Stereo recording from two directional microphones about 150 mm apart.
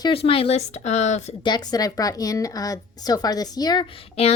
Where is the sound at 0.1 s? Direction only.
40° left (ahead or behind).